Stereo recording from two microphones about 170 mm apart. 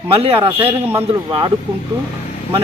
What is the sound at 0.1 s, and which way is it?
Speech, 35° right (ahead or behind).